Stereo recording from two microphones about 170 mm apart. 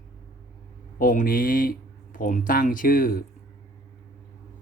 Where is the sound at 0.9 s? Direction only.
55° left (ahead or behind).